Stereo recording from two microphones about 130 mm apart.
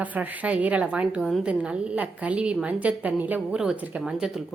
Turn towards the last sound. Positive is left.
turn(degrees=-5)  # may be behind; listen again after turning